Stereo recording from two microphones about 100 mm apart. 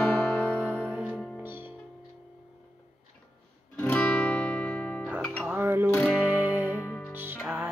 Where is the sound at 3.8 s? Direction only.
15° left (ahead or behind).